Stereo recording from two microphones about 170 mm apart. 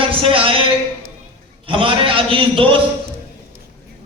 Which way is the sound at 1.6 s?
30° right (ahead or behind).